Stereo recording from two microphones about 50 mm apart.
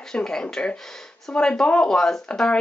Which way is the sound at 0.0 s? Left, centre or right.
Centre.